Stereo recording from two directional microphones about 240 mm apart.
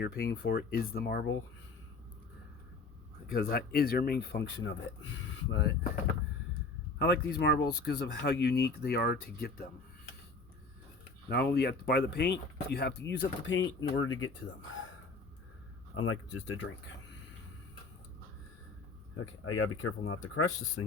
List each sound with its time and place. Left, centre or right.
0.0 s speech: left
3.3 s speech: left
7.0 s speech: left
11.3 s speech: left
16.0 s speech: left
19.1 s speech: left